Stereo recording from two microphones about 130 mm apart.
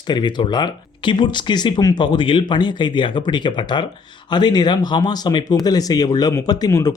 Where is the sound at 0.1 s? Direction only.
35° left (ahead or behind).